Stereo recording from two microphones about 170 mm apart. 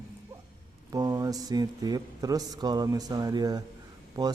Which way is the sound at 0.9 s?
20° right (ahead or behind).